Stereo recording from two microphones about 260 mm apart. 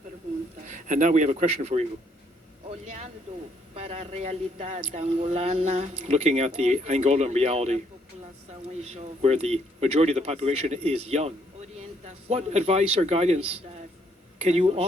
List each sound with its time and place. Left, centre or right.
0.6 s speech: right
3.8 s speech: right
8.8 s a man's voice: right